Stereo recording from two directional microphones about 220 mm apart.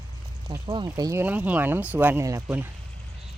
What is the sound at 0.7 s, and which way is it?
Speech, 20° right (ahead or behind).